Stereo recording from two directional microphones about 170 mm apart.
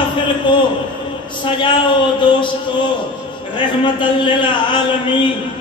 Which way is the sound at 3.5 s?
30° left (ahead or behind).